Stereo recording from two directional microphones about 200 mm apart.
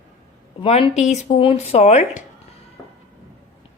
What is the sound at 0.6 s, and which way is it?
A woman's voice, 25° left (ahead or behind).